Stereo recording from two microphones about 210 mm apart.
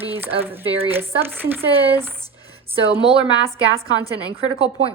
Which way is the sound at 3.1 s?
20° left (ahead or behind).